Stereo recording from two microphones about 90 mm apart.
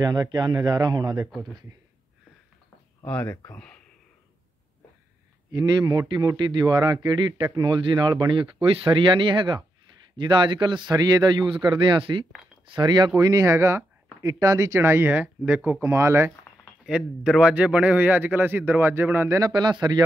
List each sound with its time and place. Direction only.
0.0 s speech: 45° right (ahead or behind)
1.3 s speech: centre (ahead or behind)
3.1 s speech: 15° left (ahead or behind)
5.5 s a man's voice: 50° right (ahead or behind); by 12.3 s 70° right (ahead or behind)
12.7 s a man's voice: 55° right (ahead or behind)
13.2 s speech: 40° right (ahead or behind)
16.8 s a man's voice: 5° right (ahead or behind); by 19.5 s 35° right (ahead or behind)
19.5 s speech: 55° right (ahead or behind)